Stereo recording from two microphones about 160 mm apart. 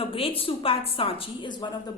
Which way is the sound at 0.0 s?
35° left (ahead or behind).